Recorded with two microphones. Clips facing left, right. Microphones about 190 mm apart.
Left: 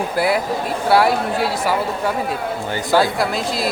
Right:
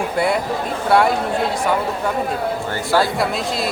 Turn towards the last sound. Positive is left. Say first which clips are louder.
# even
turn(degrees=0)  # may be behind; listen again after turning